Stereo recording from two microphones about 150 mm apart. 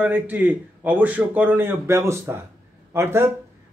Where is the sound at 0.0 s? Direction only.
10° right (ahead or behind).